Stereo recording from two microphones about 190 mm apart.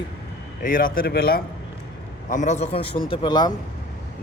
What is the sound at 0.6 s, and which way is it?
Speech, 45° left (ahead or behind).